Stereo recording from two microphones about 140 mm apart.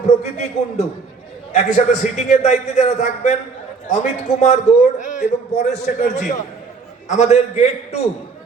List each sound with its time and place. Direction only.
0.2 s a man's voice: 55° left (ahead or behind)